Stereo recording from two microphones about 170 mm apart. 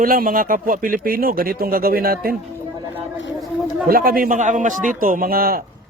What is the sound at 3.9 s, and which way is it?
Speech, 60° right (ahead or behind).